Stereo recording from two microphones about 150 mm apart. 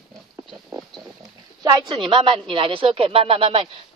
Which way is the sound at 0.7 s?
Centre (ahead or behind).